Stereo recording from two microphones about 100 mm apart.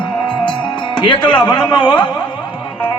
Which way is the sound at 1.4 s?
45° left (ahead or behind).